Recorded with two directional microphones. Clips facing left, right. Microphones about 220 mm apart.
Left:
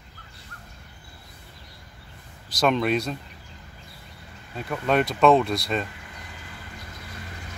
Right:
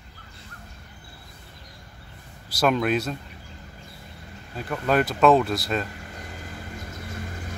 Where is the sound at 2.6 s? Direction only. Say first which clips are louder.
Even; 5° right (ahead or behind).